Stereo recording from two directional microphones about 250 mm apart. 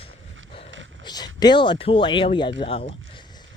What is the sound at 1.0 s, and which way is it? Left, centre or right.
Speech, centre.